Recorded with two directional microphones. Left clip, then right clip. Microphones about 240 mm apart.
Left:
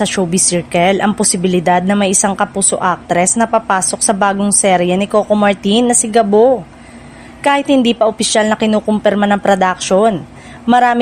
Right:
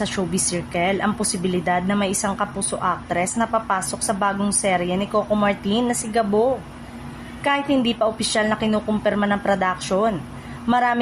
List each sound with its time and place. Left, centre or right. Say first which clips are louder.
0.0 s speech: left 9 dB; left